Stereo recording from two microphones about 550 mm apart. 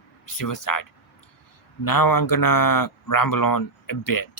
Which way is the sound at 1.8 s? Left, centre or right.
Left.